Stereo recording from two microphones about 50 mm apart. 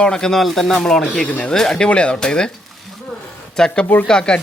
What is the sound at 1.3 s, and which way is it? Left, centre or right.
Speech, left.